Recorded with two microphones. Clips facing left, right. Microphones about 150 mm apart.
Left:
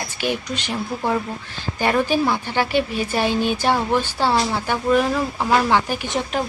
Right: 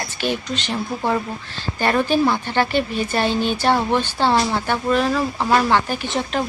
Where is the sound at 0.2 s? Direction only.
10° left (ahead or behind).